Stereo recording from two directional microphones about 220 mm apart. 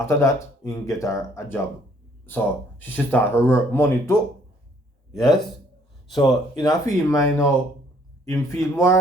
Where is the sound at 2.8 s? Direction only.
10° left (ahead or behind).